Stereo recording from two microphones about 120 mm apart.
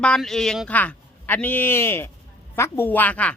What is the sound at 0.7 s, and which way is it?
A woman's voice, 15° left (ahead or behind).